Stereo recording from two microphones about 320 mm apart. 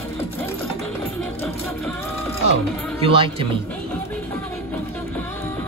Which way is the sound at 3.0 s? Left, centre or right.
Centre.